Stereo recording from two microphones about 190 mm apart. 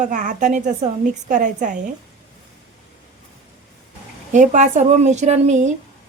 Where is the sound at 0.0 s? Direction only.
40° right (ahead or behind).